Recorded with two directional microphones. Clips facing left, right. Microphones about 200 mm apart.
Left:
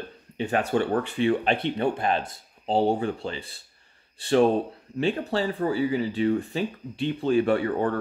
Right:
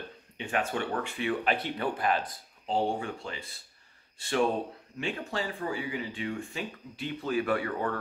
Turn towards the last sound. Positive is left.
turn(degrees=30)  # may be behind; listen again after turning